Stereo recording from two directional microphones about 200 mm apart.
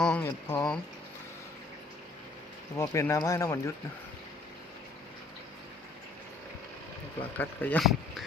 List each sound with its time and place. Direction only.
0.0 s speech: 5° left (ahead or behind)
2.7 s speech: 15° left (ahead or behind)
7.3 s speech: 5° left (ahead or behind)